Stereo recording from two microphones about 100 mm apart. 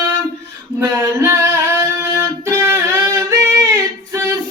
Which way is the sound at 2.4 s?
30° right (ahead or behind).